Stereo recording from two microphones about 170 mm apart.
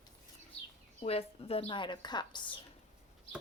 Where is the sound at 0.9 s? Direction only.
35° left (ahead or behind).